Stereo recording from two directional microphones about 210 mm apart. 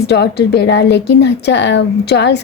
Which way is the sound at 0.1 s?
50° left (ahead or behind).